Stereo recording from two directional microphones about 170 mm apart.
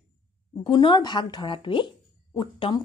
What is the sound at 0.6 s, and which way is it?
A woman's voice, 25° left (ahead or behind).